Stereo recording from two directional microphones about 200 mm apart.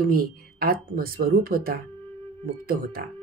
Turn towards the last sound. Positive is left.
turn(degrees=-45)  # may be behind; listen again after turning